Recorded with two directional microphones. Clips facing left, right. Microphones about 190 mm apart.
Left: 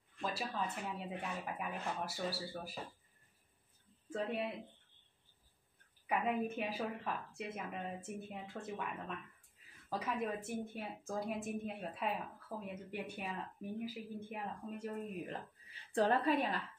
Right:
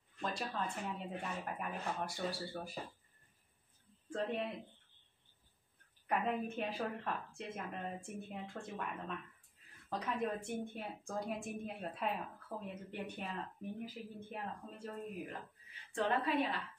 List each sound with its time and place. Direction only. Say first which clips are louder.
0.2 s speech: even; 5° left (ahead or behind)
4.1 s speech: even; 5° left (ahead or behind)
6.0 s speech: left 1 dB; 5° left (ahead or behind)
15.7 s a woman's voice: left 3 dB; 35° left (ahead or behind)